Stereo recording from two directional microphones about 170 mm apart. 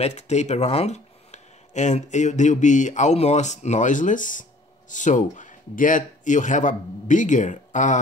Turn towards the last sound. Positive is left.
turn(degrees=45)  # may be behind; listen again after turning